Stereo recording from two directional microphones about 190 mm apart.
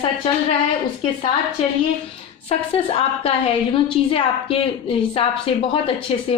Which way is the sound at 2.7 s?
30° left (ahead or behind).